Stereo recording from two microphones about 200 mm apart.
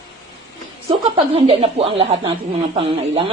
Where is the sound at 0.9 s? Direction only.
25° right (ahead or behind).